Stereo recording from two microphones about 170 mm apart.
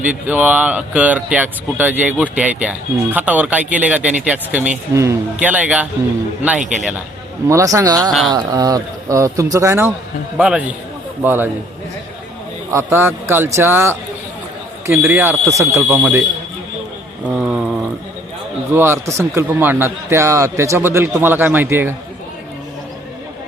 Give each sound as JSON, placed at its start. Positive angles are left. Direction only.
{"t": 0.0, "sound": "speech", "side_deg": -10}
{"t": 7.4, "sound": "speech", "side_deg": -20}
{"t": 12.7, "sound": "speech", "side_deg": -15}
{"t": 18.7, "sound": "speech", "side_deg": -15}